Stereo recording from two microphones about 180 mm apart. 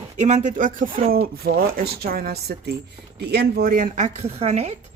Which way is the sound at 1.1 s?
55° right (ahead or behind).